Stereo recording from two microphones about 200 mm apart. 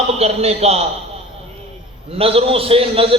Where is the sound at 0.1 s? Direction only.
30° right (ahead or behind).